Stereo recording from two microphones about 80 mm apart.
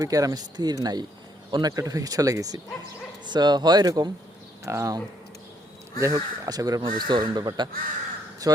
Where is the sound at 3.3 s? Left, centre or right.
Right.